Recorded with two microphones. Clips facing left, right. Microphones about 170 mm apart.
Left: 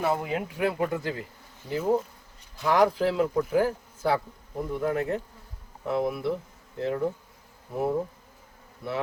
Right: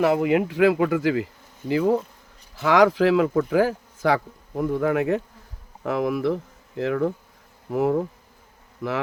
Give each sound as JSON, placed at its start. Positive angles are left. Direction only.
{"t": 0.0, "sound": "speech", "side_deg": -75}